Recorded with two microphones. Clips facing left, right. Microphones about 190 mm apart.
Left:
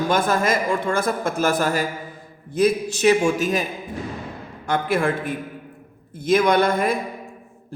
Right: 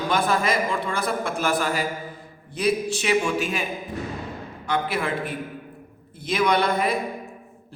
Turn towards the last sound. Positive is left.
turn(degrees=45)  # may be behind; listen again after turning